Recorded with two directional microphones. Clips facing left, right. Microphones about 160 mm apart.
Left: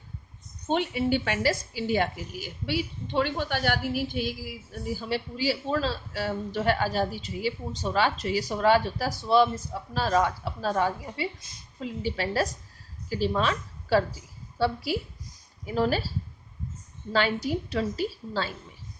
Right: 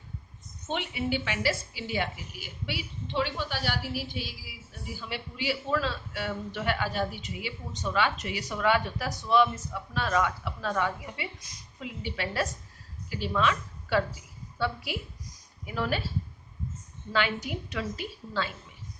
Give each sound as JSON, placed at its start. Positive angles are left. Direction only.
{"t": 0.7, "sound": "a woman's voice", "side_deg": 40}